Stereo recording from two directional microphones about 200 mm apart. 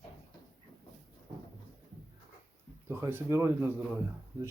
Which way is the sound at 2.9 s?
10° right (ahead or behind).